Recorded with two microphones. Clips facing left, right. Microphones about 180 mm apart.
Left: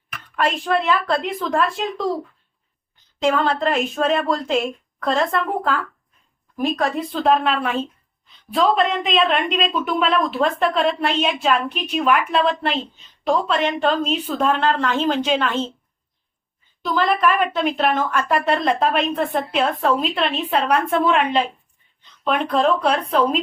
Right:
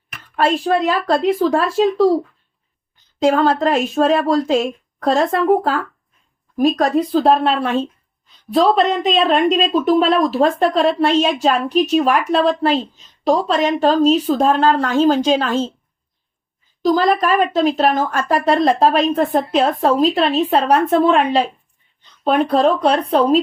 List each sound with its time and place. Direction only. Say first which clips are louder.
0.3 s a woman's voice: right 4 dB; 35° right (ahead or behind)
3.2 s a woman's voice: right 5 dB; 40° right (ahead or behind)
6.6 s a woman's voice: right 6 dB; 40° right (ahead or behind)
16.8 s a woman's voice: right 4 dB; 40° right (ahead or behind)